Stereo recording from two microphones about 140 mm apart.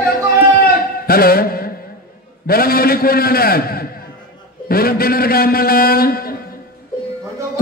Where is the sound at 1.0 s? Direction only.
90° left.